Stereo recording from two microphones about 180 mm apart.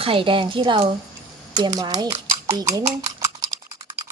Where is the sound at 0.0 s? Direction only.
30° right (ahead or behind).